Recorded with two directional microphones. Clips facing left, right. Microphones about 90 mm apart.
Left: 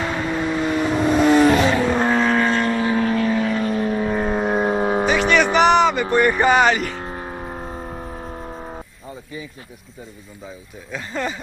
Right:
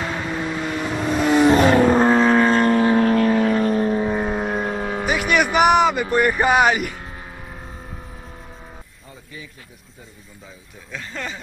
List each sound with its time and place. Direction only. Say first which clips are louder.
0.0 s vehicle: left 3 dB; centre (ahead or behind)
1.6 s vehicle: right 4 dB; 45° right (ahead or behind)
3.9 s vehicle: even; 10° right (ahead or behind); by 4.6 s 5° left (ahead or behind)
4.6 s vehicle: left 6 dB; 25° left (ahead or behind)
5.0 s music: even; 10° right (ahead or behind)
6.1 s speech: left 2 dB; 5° right (ahead or behind)
7.0 s vehicle: left 7 dB; 40° left (ahead or behind)
10.9 s speech: left 5 dB; 10° left (ahead or behind)